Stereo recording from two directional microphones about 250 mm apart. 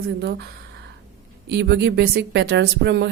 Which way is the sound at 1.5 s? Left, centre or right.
Right.